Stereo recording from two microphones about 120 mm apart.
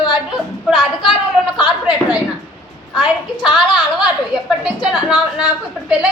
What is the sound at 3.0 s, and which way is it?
Speech, 40° left (ahead or behind).